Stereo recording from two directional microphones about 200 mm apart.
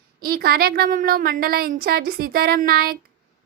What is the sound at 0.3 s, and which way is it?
A woman's voice, 50° right (ahead or behind).